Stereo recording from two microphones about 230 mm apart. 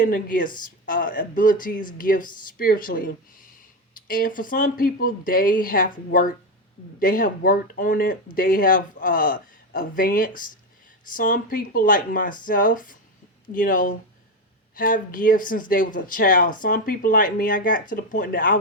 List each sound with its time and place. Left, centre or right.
0.0 s speech: left